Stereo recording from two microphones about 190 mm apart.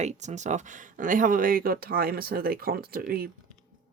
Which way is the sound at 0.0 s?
35° right (ahead or behind).